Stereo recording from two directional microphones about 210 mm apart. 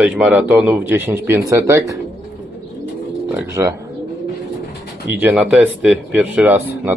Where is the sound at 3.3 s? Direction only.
10° right (ahead or behind).